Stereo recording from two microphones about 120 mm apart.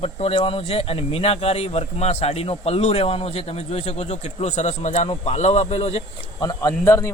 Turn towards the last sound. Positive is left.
turn(degrees=25)  # may be behind; listen again after turning